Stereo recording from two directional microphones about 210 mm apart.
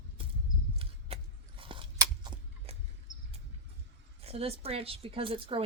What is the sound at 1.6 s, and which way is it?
Crunch, 25° right (ahead or behind).